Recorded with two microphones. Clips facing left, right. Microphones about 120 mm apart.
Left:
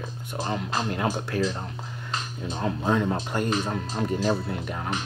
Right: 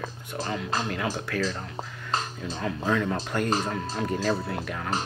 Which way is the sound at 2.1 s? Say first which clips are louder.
Right 2 dB; 35° right (ahead or behind).